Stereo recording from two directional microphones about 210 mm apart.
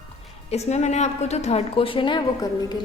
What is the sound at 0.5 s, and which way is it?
A woman's voice, 30° left (ahead or behind).